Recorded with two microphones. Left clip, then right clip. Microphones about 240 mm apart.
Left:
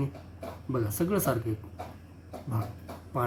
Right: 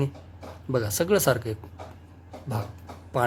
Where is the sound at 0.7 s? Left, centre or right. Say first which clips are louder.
Right 7 dB; right.